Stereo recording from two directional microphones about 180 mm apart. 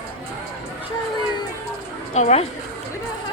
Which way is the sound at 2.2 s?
40° left (ahead or behind).